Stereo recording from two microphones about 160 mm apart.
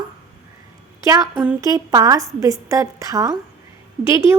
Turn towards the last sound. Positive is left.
turn(degrees=-15)  # may be behind; listen again after turning